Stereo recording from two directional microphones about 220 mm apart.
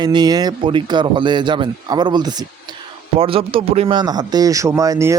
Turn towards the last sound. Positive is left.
turn(degrees=-15)  # may be behind; listen again after turning